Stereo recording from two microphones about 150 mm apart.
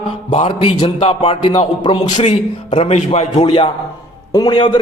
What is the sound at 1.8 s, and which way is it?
Speech, 30° left (ahead or behind).